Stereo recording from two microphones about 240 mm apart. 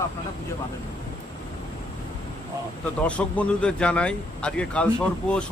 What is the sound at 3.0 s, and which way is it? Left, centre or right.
Speech, centre.